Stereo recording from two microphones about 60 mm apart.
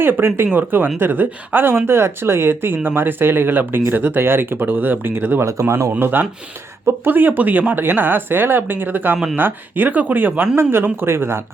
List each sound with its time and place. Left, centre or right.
0.0 s speech: right
5.4 s speech: right
5.9 s speech: right
10.6 s speech: right